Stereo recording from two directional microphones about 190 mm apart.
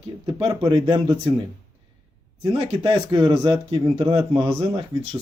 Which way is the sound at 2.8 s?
20° right (ahead or behind).